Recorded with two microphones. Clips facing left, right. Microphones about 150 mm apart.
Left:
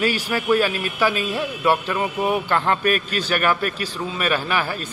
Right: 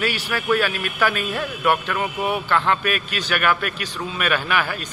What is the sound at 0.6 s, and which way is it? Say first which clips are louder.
A man's voice: left 2 dB; 35° left (ahead or behind).